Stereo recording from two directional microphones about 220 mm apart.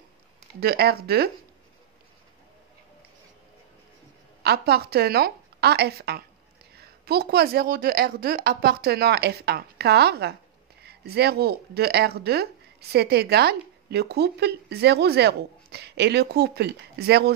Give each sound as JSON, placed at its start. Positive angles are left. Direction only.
{"t": 0.6, "sound": "speech", "side_deg": -45}
{"t": 4.4, "sound": "speech", "side_deg": -45}